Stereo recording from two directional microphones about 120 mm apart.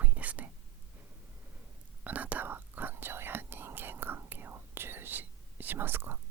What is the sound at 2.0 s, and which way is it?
Whispering, 15° right (ahead or behind).